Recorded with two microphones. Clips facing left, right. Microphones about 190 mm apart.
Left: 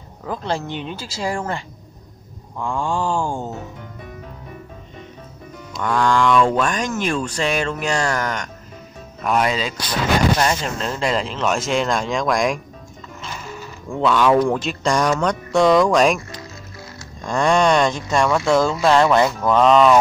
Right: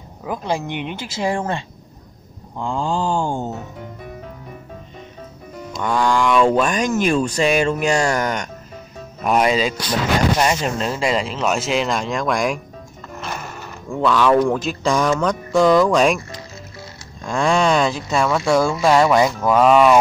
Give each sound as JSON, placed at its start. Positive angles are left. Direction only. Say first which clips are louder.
{"t": 0.2, "sound": "speech", "louder": "right 1 dB", "side_deg": -10}
{"t": 5.8, "sound": "speech", "louder": "even", "side_deg": -10}
{"t": 13.2, "sound": "music", "louder": "right 3 dB", "side_deg": -60}
{"t": 13.8, "sound": "speech", "louder": "even", "side_deg": 0}
{"t": 17.2, "sound": "speech", "louder": "left 1 dB", "side_deg": -5}